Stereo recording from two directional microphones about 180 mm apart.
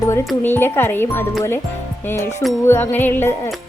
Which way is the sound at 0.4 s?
10° left (ahead or behind).